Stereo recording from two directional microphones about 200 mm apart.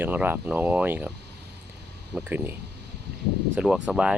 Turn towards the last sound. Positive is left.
turn(degrees=-5)  # may be behind; listen again after turning